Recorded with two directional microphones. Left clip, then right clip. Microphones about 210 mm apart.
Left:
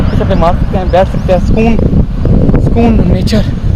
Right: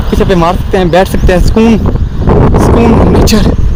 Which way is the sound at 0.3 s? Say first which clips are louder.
Right 1 dB; 55° right (ahead or behind).